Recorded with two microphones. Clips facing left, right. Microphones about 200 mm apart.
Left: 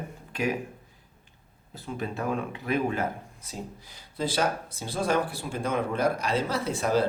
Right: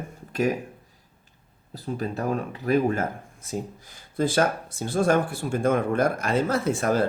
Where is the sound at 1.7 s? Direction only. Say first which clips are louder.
Right 4 dB; 40° right (ahead or behind).